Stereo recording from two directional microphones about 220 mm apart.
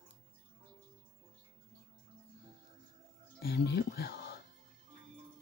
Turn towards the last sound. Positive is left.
turn(degrees=50)  # may be behind; listen again after turning